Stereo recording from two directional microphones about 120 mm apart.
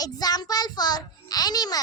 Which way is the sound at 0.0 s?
35° left (ahead or behind).